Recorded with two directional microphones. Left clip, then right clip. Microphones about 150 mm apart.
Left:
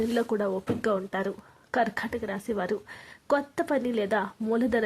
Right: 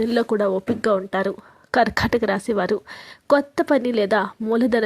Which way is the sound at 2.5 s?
35° right (ahead or behind).